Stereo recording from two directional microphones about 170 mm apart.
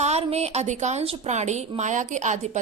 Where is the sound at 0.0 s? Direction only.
40° right (ahead or behind).